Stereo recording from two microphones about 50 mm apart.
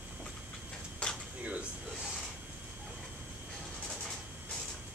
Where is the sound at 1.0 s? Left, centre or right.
Centre.